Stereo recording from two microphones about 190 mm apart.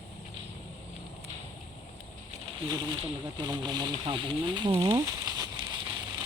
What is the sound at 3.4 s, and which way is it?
Speech, 20° right (ahead or behind).